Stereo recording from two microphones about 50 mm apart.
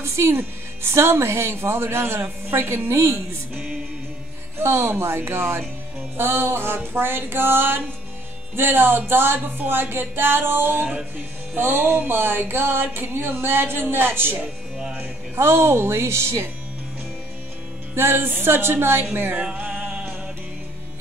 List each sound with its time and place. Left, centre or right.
0.0 s music: right
0.9 s a man's voice: right
3.5 s music: right
4.6 s a man's voice: right
6.1 s music: right
10.8 s music: right
11.1 s music: right
15.3 s a man's voice: right
17.9 s music: right
19.3 s music: right